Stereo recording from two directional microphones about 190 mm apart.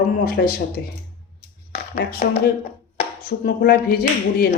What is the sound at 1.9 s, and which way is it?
Speech, 50° left (ahead or behind).